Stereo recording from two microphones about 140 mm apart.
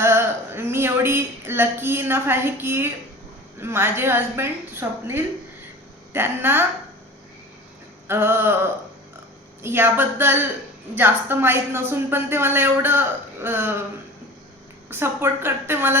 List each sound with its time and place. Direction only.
0.0 s speech: 15° right (ahead or behind)
8.0 s speech: 15° right (ahead or behind)
14.8 s speech: 15° right (ahead or behind)